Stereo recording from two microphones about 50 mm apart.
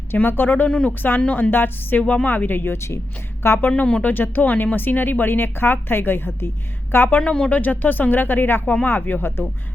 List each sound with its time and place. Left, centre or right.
0.3 s speech: left
2.7 s a woman's voice: left
3.8 s speech: left
4.0 s speech: left
7.2 s speech: centre
7.5 s speech: left